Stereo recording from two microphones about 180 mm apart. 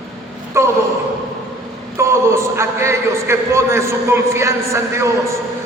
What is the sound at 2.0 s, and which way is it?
A man's voice, 15° right (ahead or behind).